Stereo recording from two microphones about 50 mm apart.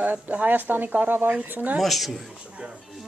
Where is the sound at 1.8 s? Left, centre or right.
Centre.